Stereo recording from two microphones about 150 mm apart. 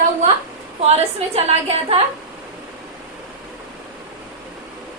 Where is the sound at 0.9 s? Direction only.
45° right (ahead or behind).